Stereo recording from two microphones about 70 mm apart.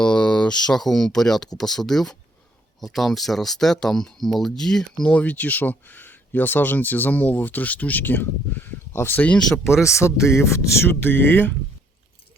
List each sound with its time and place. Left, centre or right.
0.0 s speech: centre
5.2 s speech: left
10.8 s speech: left